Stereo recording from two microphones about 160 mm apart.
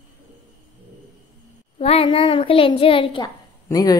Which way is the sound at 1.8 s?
40° left (ahead or behind).